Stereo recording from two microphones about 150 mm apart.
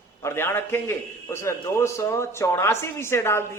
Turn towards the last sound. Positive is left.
turn(degrees=15)  # may be behind; listen again after turning